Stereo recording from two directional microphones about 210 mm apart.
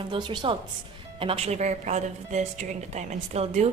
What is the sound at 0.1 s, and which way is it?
A woman's voice, 25° right (ahead or behind).